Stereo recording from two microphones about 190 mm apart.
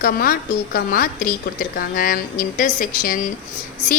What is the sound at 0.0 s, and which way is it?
A woman's voice, 50° left (ahead or behind).